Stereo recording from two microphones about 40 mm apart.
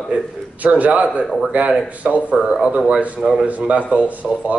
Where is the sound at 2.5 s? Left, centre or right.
Centre.